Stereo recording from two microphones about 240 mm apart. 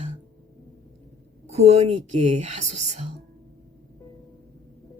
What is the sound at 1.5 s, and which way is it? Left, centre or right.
Speech, right.